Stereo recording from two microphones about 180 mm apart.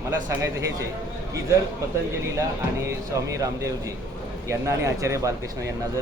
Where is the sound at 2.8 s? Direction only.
15° right (ahead or behind).